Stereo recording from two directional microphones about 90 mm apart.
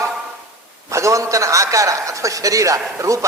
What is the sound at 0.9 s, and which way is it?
A man's voice, 35° right (ahead or behind).